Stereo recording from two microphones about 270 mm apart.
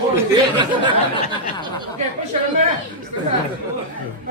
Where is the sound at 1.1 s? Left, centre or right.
Centre.